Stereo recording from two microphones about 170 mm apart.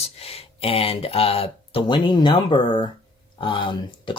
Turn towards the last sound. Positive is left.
turn(degrees=30)  # may be behind; listen again after turning